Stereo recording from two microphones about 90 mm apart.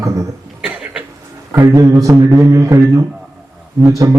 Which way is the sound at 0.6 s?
15° right (ahead or behind).